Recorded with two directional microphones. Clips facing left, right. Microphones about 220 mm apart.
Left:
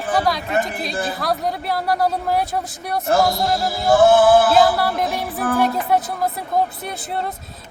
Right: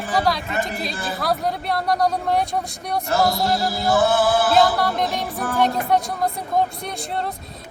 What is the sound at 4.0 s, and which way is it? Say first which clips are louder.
Music: left 7 dB; 45° left (ahead or behind).